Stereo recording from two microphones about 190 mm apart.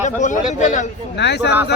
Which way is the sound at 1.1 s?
65° left (ahead or behind).